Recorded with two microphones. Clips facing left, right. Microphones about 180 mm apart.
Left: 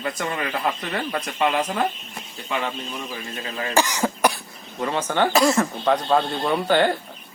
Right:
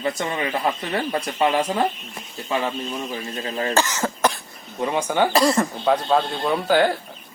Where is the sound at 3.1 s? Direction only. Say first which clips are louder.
Right 3 dB; 35° right (ahead or behind).